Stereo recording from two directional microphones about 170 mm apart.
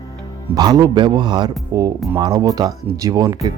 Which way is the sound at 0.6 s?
25° right (ahead or behind).